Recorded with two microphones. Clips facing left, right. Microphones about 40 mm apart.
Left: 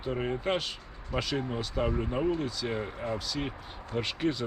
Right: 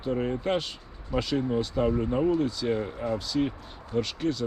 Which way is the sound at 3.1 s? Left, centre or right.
Centre.